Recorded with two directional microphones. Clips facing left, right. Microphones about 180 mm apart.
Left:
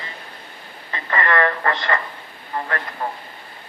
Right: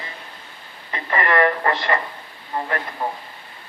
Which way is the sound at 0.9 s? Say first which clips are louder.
Right 1 dB; 20° right (ahead or behind).